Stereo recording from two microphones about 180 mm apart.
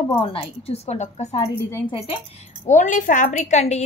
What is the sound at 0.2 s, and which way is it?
A woman's voice, 30° left (ahead or behind).